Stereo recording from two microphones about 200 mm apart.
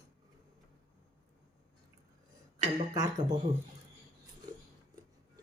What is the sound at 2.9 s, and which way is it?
Speech, 20° right (ahead or behind).